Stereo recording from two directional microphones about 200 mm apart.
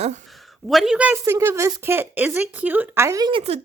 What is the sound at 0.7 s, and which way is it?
A woman's voice, centre (ahead or behind).